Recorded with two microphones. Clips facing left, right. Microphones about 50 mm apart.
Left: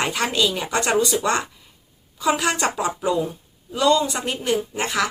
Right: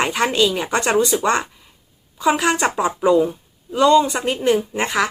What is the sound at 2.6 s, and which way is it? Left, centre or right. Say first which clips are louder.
Speech: right 5 dB; right.